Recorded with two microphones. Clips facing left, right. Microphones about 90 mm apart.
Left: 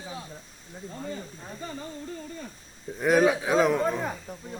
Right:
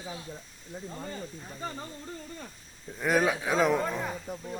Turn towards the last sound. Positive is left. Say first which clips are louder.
# left 3 dB
turn(degrees=0)  # may be behind; listen again after turning